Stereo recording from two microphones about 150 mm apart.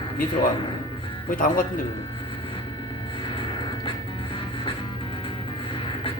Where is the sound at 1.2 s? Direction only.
65° left (ahead or behind).